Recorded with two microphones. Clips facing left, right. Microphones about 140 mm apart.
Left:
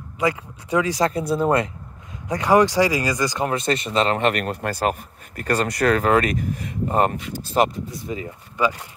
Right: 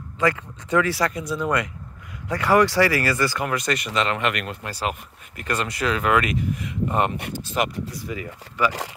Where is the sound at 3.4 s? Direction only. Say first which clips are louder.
Left 3 dB; 25° left (ahead or behind).